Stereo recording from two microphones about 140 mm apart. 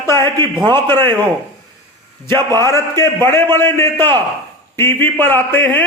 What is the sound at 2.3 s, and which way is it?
Speech, 30° right (ahead or behind).